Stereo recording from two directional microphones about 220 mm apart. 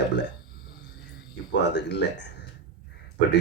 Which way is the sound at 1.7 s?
50° left (ahead or behind).